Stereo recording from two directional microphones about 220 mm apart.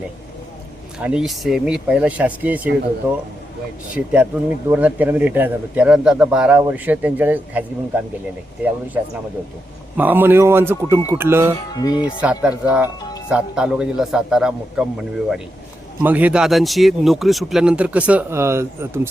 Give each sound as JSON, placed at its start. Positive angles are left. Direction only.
{"t": 0.9, "sound": "speech", "side_deg": -5}
{"t": 3.9, "sound": "speech", "side_deg": -5}
{"t": 10.0, "sound": "speech", "side_deg": -10}
{"t": 11.7, "sound": "music", "side_deg": 15}
{"t": 12.2, "sound": "speech", "side_deg": -5}